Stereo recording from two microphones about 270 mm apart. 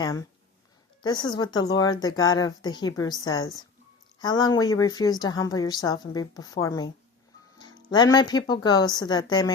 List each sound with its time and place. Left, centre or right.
0.0 s a woman's voice: centre